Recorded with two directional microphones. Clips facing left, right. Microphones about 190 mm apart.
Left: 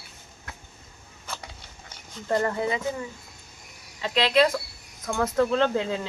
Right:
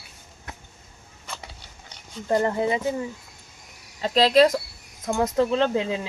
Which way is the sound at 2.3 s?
20° right (ahead or behind).